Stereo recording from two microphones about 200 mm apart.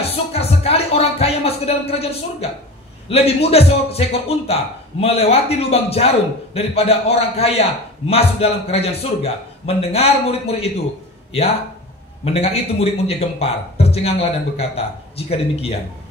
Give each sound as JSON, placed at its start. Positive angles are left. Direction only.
{"t": 0.1, "sound": "a sound", "side_deg": 30}
{"t": 3.1, "sound": "a man's voice", "side_deg": 30}
{"t": 12.3, "sound": "a man's voice", "side_deg": 30}